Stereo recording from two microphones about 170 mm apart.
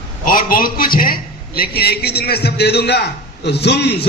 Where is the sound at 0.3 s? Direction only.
55° left (ahead or behind).